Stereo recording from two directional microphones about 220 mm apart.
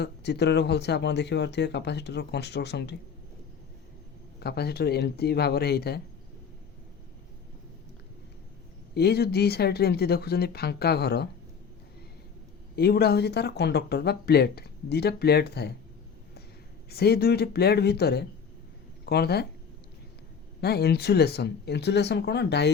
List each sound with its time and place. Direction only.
0.0 s speech: 50° left (ahead or behind)
4.4 s speech: 45° left (ahead or behind)
9.0 s speech: 45° left (ahead or behind)
12.7 s speech: 45° left (ahead or behind)
16.9 s speech: 45° left (ahead or behind)
20.6 s speech: 45° left (ahead or behind)